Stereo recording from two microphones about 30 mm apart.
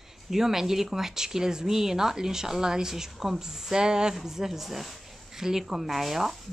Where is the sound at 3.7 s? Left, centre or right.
Right.